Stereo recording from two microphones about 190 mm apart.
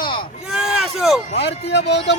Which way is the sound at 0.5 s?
5° right (ahead or behind).